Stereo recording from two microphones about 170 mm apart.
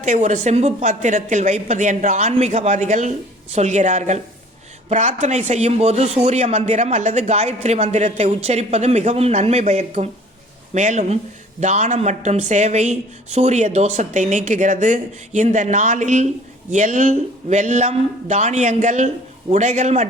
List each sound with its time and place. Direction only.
0.0 s a man's voice: 45° right (ahead or behind)